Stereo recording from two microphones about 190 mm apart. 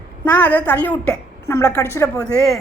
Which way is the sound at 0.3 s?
10° left (ahead or behind).